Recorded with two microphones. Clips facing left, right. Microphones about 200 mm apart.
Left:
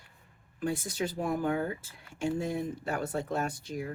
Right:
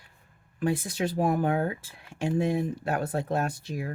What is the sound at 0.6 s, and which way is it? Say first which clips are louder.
Speech: right 4 dB; 65° right (ahead or behind).